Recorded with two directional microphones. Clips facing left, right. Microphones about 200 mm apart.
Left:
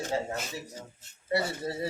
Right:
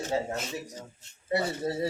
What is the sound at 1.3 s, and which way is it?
Speech, 25° right (ahead or behind).